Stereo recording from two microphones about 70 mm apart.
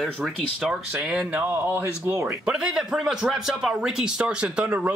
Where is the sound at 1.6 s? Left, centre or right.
Right.